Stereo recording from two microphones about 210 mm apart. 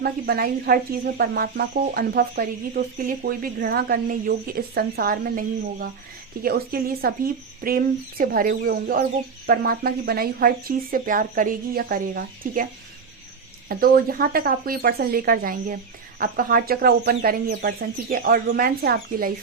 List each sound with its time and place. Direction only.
0.0 s speech: 45° right (ahead or behind)
13.7 s speech: 45° right (ahead or behind)